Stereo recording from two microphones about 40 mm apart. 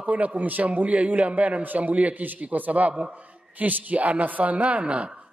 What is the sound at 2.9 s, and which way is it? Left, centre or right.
A man's voice, right.